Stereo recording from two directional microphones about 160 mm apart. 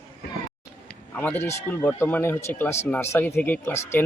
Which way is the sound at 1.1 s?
10° left (ahead or behind).